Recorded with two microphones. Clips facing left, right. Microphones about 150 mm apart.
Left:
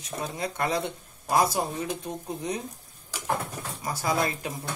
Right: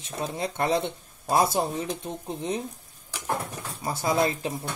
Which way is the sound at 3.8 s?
25° right (ahead or behind).